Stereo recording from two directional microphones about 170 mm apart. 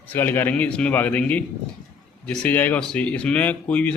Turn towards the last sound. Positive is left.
turn(degrees=5)  # may be behind; listen again after turning